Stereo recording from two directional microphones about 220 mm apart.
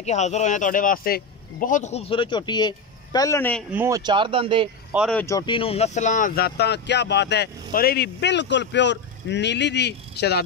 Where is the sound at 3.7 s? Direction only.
15° right (ahead or behind).